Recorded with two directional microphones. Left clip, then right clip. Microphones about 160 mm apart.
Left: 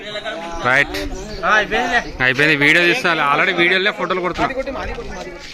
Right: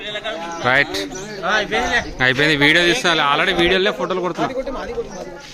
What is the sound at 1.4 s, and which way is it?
Speech, 25° left (ahead or behind).